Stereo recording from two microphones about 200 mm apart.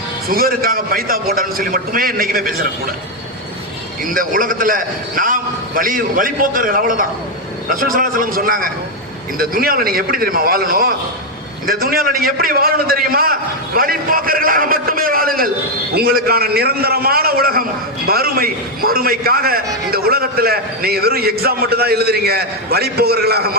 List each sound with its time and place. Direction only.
0.3 s a man's voice: 45° right (ahead or behind)
4.0 s a man's voice: 45° right (ahead or behind)